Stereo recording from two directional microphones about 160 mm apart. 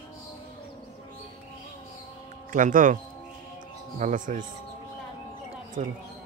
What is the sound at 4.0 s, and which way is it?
Speech, 55° right (ahead or behind).